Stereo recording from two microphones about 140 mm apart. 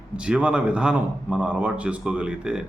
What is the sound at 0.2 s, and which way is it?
A man's voice, 5° right (ahead or behind).